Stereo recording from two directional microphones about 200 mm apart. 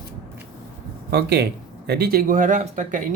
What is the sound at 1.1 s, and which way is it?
Speech, 55° right (ahead or behind).